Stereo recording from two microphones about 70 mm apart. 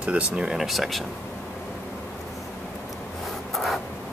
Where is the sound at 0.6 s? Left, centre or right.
Centre.